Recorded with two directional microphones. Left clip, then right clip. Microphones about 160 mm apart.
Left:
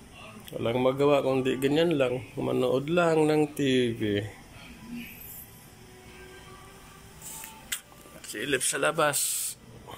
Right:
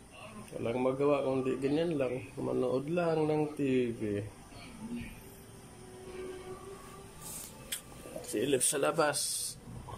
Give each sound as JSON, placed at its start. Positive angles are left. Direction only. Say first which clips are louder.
{"t": 0.5, "sound": "speech", "louder": "left 6 dB", "side_deg": 0}
{"t": 8.3, "sound": "speech", "louder": "left 2 dB", "side_deg": -20}
{"t": 8.9, "sound": "speech", "louder": "left 4 dB", "side_deg": 0}